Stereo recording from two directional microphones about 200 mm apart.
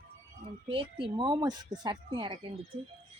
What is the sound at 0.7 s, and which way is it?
Speech, 25° right (ahead or behind).